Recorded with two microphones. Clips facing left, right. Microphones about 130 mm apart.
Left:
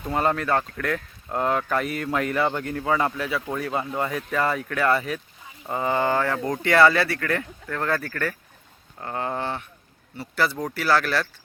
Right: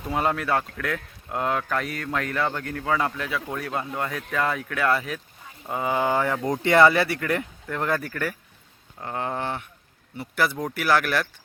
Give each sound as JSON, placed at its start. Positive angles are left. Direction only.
{"t": 0.0, "sound": "speech", "side_deg": 0}